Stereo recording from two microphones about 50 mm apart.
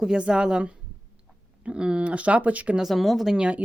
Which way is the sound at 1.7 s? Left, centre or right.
Centre.